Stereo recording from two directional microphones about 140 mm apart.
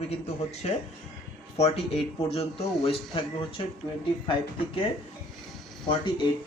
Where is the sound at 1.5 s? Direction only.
50° left (ahead or behind).